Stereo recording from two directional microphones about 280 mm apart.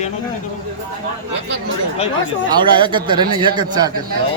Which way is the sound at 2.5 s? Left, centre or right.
Centre.